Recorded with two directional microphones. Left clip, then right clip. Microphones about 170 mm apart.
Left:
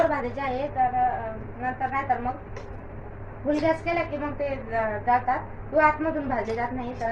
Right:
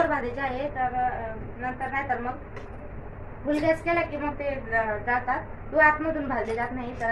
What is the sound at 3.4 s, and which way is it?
A woman's voice, 5° right (ahead or behind).